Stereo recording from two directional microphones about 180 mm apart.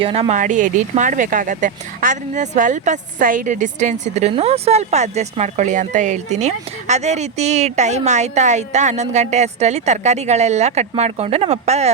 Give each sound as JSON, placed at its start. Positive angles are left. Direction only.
{"t": 0.0, "sound": "speech", "side_deg": -35}